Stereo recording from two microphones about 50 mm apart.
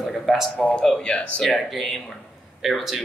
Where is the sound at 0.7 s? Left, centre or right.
Centre.